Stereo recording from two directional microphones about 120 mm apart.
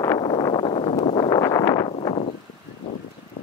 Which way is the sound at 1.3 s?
30° left (ahead or behind).